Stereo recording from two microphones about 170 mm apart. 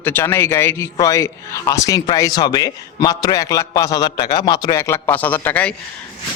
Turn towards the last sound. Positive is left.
turn(degrees=10)  # may be behind; listen again after turning